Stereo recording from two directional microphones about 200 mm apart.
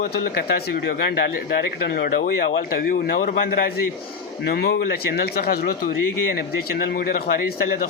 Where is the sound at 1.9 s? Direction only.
50° left (ahead or behind).